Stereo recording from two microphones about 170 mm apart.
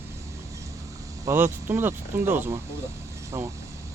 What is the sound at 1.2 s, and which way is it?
Speech, 10° right (ahead or behind).